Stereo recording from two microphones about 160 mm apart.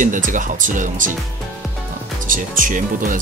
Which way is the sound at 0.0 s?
55° right (ahead or behind).